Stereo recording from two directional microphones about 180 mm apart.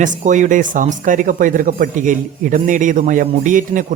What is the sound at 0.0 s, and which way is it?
Speech, 45° right (ahead or behind).